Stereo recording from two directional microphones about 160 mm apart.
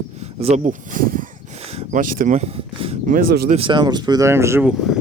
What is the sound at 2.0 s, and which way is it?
Speech, 55° right (ahead or behind).